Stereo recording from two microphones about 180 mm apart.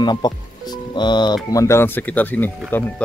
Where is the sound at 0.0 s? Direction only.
25° left (ahead or behind).